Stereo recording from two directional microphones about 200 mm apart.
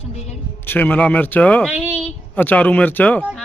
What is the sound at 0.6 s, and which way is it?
A man's voice, 10° left (ahead or behind).